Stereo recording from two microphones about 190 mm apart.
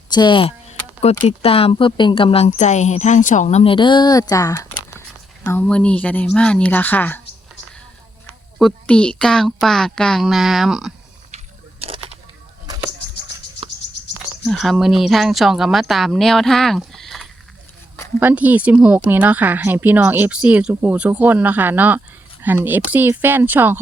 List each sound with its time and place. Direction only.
0.1 s a woman's voice: 25° left (ahead or behind)
8.5 s speech: 5° left (ahead or behind)
13.6 s insect: 25° right (ahead or behind)
14.4 s speech: centre (ahead or behind)
18.2 s speech: 10° right (ahead or behind)